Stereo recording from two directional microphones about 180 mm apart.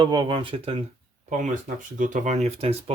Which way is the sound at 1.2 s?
45° right (ahead or behind).